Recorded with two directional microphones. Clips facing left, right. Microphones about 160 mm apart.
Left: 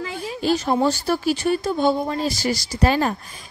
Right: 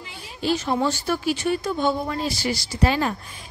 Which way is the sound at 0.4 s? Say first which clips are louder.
Left 3 dB; 45° left (ahead or behind).